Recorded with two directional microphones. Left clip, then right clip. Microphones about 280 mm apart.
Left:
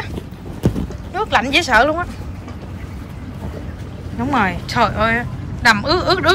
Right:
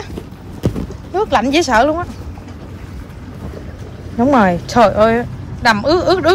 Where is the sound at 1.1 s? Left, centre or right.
Centre.